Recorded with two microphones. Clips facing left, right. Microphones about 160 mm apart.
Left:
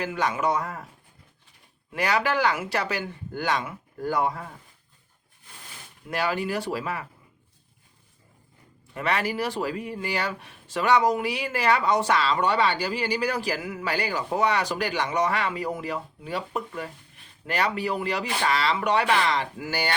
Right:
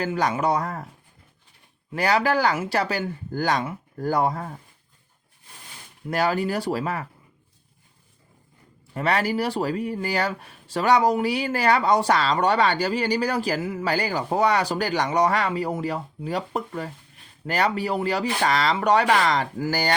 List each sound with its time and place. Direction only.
0.0 s speech: 35° right (ahead or behind)
1.9 s speech: 35° right (ahead or behind)
6.1 s speech: 40° right (ahead or behind)
9.0 s speech: 35° right (ahead or behind)